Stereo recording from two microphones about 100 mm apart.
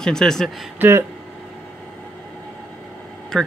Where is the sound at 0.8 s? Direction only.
25° right (ahead or behind).